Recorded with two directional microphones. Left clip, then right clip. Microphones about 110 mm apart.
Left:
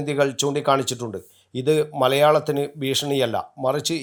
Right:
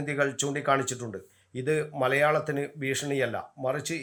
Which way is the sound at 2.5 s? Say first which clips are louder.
Left 7 dB; 35° left (ahead or behind).